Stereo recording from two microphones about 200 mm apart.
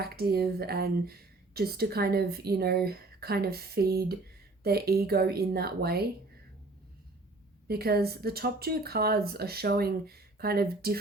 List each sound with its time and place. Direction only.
0.0 s speech: 50° right (ahead or behind)
7.7 s speech: 50° right (ahead or behind)